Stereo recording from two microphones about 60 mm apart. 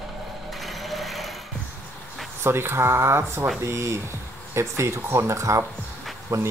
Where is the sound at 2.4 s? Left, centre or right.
Right.